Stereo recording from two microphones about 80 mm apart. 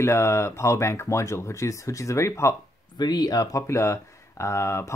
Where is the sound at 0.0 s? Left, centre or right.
Left.